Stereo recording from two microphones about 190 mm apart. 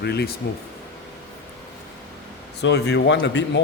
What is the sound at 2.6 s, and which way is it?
Speech, 60° left (ahead or behind).